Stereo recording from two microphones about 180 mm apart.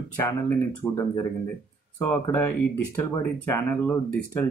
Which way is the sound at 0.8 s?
10° left (ahead or behind).